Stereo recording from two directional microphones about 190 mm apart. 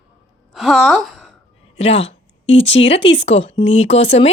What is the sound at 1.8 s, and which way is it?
A woman's voice, 30° left (ahead or behind).